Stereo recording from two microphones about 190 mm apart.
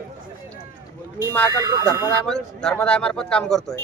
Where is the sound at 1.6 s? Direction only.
20° right (ahead or behind).